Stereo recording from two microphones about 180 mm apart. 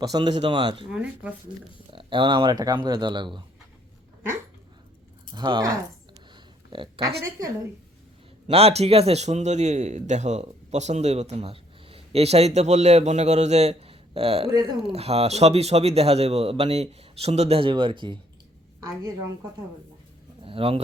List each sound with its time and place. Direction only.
0.0 s speech: 25° right (ahead or behind)
0.9 s speech: 5° right (ahead or behind)
1.9 s speech: 25° right (ahead or behind)
5.3 s speech: 25° right (ahead or behind)
6.1 s a sound: 25° right (ahead or behind)
7.3 s speech: 20° right (ahead or behind)
8.4 s a man's voice: 35° right (ahead or behind)
20.4 s speech: 30° right (ahead or behind)